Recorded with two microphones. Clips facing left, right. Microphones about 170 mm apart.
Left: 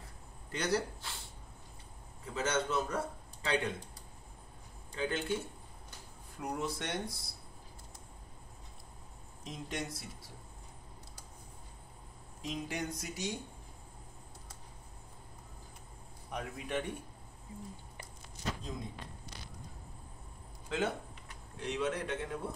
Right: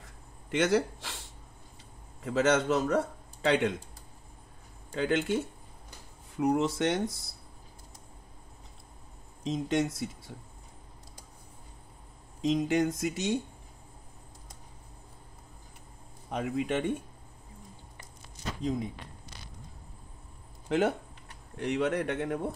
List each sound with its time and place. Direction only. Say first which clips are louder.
0.5 s speech: right 8 dB; 90° right
2.2 s a man's voice: right 9 dB; 85° right
4.9 s a man's voice: right 7 dB; 85° right
9.4 s speech: right 12 dB; 90° right
12.4 s speech: right 12 dB; 90° right
16.3 s speech: right 9 dB; 90° right
18.6 s speech: right 11 dB; 75° right (ahead or behind)
20.6 s speech: right 7 dB; 70° right (ahead or behind)